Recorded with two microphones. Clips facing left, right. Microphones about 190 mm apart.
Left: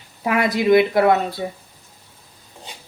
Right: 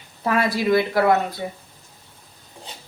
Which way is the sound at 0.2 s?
15° left (ahead or behind).